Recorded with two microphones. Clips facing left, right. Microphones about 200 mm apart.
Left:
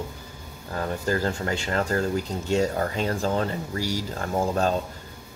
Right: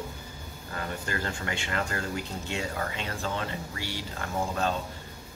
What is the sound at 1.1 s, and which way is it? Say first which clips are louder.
Speech: left 8 dB; 40° left (ahead or behind).